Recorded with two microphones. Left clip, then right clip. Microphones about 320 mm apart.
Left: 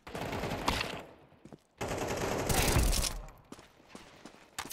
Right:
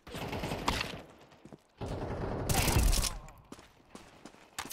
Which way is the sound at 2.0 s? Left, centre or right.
Left.